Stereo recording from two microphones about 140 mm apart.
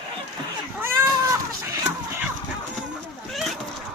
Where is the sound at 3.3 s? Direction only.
Centre (ahead or behind).